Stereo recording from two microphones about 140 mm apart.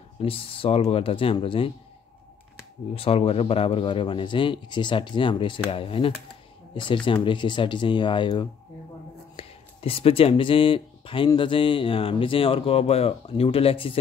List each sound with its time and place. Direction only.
0.2 s speech: 40° left (ahead or behind)
2.9 s speech: 45° left (ahead or behind)